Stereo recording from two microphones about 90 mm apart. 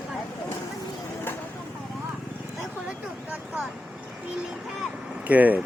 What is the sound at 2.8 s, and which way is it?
Vehicle, 5° right (ahead or behind).